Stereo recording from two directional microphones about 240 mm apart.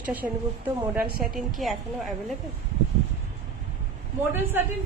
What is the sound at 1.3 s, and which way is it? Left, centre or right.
Speech, centre.